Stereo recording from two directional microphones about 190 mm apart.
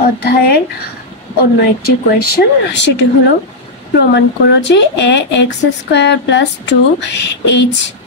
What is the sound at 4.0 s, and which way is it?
Speech, 65° left (ahead or behind).